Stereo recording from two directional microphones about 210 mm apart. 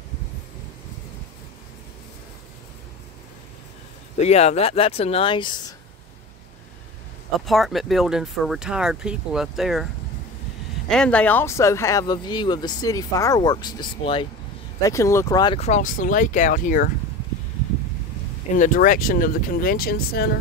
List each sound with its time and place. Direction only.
4.2 s speech: 30° left (ahead or behind)
7.3 s speech: centre (ahead or behind)
10.9 s speech: 5° left (ahead or behind); by 16.9 s 40° left (ahead or behind)
18.6 s speech: 40° left (ahead or behind)